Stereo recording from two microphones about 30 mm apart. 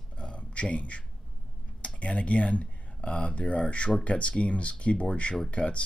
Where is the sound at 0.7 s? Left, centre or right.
Left.